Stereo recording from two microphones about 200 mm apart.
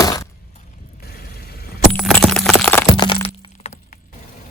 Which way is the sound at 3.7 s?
35° left (ahead or behind).